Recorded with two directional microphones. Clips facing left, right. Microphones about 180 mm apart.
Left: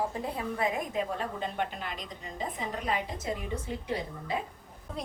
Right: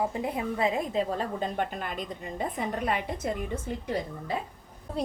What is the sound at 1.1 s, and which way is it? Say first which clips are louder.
A woman's voice: right 3 dB; 45° right (ahead or behind).